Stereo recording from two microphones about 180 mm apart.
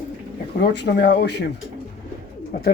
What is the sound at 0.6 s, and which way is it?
Speech, 70° left (ahead or behind).